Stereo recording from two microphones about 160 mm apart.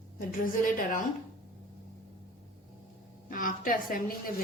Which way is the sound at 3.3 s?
55° left (ahead or behind).